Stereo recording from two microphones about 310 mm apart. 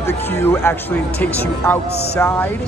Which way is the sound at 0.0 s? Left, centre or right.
Centre.